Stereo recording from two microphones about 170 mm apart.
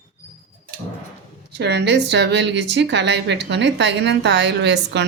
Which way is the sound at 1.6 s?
80° right.